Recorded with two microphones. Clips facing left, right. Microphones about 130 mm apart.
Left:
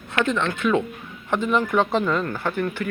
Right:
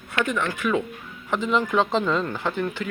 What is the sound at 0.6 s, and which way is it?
Speech, 5° right (ahead or behind).